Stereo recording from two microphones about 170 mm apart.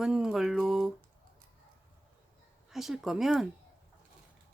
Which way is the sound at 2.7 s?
Centre (ahead or behind).